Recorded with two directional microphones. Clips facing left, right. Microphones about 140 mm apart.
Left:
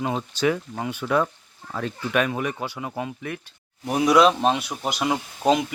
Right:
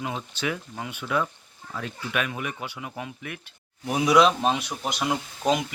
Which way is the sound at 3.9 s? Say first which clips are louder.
Left 2 dB; centre (ahead or behind).